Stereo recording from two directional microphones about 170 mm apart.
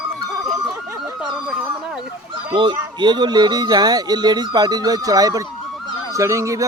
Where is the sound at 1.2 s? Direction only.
5° right (ahead or behind).